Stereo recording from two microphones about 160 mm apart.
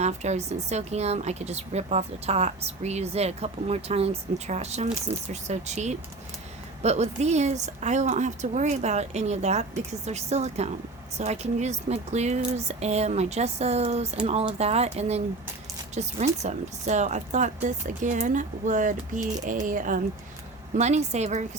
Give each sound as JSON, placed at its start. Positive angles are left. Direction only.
{"t": 0.0, "sound": "a woman's voice", "side_deg": -45}
{"t": 20.7, "sound": "a woman's voice", "side_deg": -45}